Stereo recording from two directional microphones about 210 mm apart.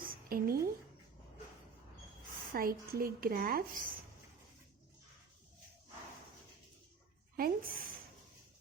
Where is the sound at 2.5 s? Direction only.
45° right (ahead or behind).